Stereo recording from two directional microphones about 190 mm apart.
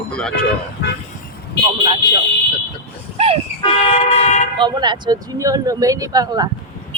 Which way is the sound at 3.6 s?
30° left (ahead or behind).